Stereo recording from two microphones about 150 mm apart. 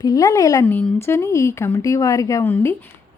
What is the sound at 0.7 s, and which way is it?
Speech, 10° left (ahead or behind).